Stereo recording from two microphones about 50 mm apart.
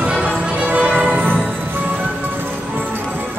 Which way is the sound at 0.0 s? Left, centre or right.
Right.